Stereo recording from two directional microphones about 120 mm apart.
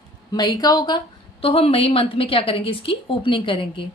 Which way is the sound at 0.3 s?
35° left (ahead or behind).